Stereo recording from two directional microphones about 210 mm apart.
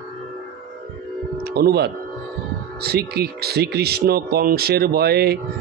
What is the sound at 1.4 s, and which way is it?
Speech, 50° right (ahead or behind).